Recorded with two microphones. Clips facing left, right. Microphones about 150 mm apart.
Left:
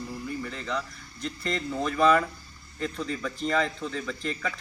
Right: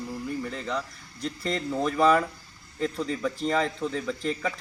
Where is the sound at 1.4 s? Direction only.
5° right (ahead or behind).